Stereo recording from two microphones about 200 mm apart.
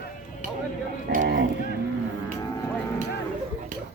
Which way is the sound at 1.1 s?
45° right (ahead or behind).